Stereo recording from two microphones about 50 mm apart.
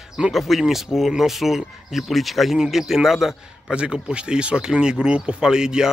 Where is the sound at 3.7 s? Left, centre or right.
Centre.